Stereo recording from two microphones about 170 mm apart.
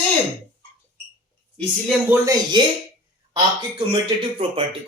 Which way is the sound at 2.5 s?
25° right (ahead or behind).